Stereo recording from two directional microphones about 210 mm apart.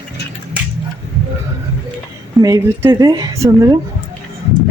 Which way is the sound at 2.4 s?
15° right (ahead or behind).